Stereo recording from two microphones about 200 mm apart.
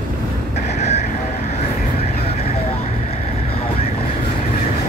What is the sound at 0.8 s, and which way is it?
Vehicle, 35° left (ahead or behind).